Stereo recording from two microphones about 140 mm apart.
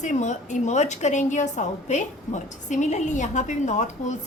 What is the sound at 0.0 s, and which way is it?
A woman's voice, 60° left (ahead or behind).